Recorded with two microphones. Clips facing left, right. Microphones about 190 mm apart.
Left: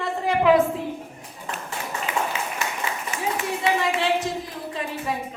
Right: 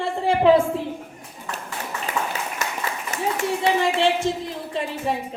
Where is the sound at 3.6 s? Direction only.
25° right (ahead or behind).